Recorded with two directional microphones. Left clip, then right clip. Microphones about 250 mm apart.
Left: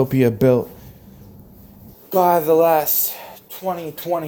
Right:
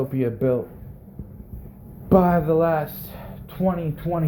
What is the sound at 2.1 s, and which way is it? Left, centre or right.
Speech, left.